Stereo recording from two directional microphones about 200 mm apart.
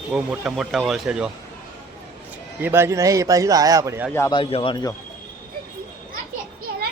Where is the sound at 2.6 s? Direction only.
10° right (ahead or behind).